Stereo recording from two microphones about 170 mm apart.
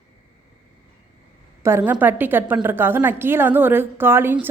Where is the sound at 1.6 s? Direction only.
15° right (ahead or behind).